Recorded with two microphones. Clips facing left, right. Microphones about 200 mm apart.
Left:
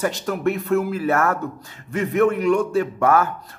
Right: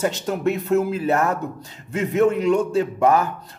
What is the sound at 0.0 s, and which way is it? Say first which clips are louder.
A man's voice: even; 20° right (ahead or behind).